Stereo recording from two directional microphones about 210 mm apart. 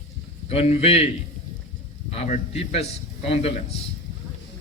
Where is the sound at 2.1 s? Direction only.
30° left (ahead or behind).